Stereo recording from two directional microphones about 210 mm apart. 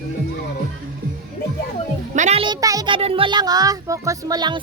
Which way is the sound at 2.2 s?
30° right (ahead or behind).